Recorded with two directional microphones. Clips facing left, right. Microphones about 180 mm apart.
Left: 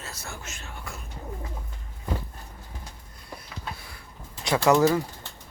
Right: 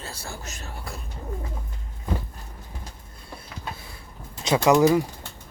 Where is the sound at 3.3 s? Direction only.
25° right (ahead or behind).